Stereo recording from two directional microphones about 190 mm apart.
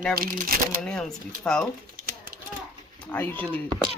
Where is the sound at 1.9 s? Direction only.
50° right (ahead or behind).